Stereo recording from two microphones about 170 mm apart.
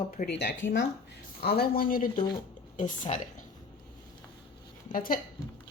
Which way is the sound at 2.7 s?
50° left (ahead or behind).